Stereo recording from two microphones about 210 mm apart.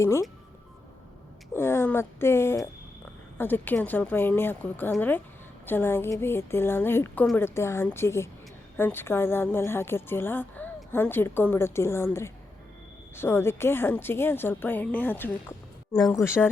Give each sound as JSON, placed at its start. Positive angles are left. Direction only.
{"t": 0.0, "sound": "speech", "side_deg": 15}
{"t": 1.5, "sound": "speech", "side_deg": 10}